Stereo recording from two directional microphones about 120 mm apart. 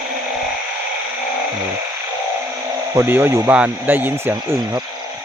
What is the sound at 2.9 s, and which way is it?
A man's voice, 20° right (ahead or behind).